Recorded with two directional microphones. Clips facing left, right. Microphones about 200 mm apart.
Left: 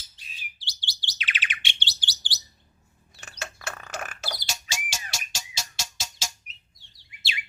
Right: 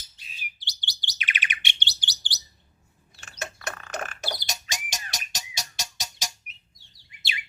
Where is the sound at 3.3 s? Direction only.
20° right (ahead or behind).